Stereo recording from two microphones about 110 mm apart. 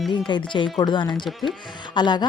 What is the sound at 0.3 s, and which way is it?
Speech, 45° left (ahead or behind).